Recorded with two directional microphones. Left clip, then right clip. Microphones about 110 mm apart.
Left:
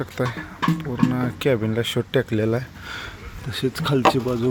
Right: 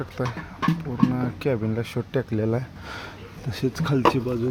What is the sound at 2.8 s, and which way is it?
Speech, 30° right (ahead or behind).